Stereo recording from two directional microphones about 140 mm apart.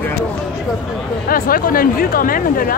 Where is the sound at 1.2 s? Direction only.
90° left.